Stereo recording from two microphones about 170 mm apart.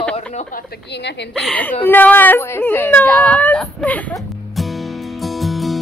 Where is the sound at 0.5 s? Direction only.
85° left.